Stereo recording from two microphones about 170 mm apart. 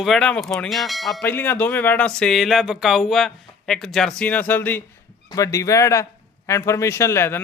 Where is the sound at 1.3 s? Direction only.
10° left (ahead or behind).